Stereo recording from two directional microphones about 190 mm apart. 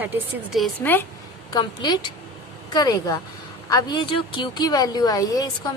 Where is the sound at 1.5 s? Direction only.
20° left (ahead or behind).